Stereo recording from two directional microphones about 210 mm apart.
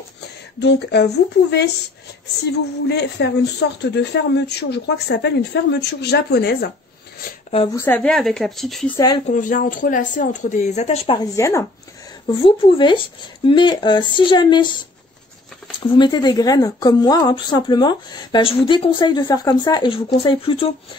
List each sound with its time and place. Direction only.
0.6 s speech: 55° left (ahead or behind)
2.9 s speech: 50° left (ahead or behind)
7.5 s speech: 15° left (ahead or behind); by 8.9 s centre (ahead or behind)
8.9 s a woman's voice: 20° left (ahead or behind)
9.3 s speech: 40° left (ahead or behind)
11.3 s speech: 15° left (ahead or behind)
12.4 s a woman's voice: 25° left (ahead or behind)
16.0 s a woman's voice: 20° left (ahead or behind)